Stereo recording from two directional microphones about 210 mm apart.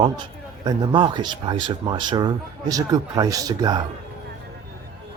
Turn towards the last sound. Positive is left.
turn(degrees=-20)  # may be behind; listen again after turning